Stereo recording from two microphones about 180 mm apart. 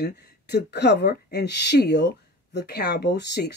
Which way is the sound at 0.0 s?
65° left (ahead or behind).